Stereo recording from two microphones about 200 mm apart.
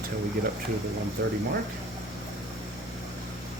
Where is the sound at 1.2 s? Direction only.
55° right (ahead or behind).